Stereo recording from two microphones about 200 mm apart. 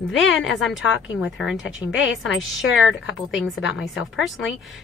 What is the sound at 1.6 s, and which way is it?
A woman's voice, 70° left (ahead or behind).